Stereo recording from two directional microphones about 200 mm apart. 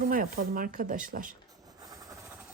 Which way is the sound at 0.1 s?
45° right (ahead or behind).